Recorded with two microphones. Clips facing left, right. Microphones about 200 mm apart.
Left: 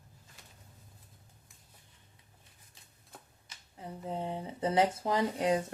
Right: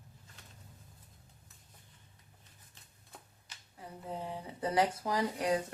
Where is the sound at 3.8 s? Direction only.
25° left (ahead or behind).